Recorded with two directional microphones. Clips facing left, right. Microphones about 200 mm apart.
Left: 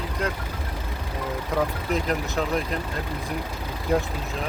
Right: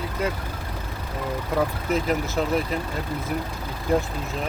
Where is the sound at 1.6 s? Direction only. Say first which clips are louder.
Right 2 dB; centre (ahead or behind).